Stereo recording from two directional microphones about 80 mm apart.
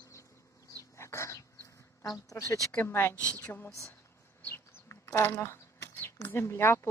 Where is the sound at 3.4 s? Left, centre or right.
Left.